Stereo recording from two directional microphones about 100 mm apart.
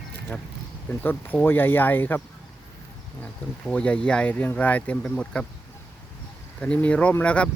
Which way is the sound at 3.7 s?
10° left (ahead or behind).